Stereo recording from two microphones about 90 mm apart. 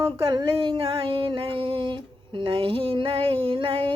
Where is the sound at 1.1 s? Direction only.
75° right (ahead or behind).